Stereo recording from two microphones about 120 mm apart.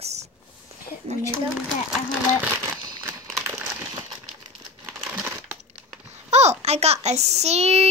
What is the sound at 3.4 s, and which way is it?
Crumpling, 20° right (ahead or behind).